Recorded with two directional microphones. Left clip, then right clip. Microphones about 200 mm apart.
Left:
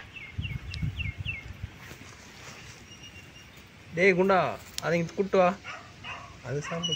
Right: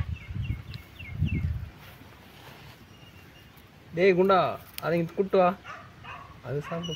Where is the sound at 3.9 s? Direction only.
40° right (ahead or behind).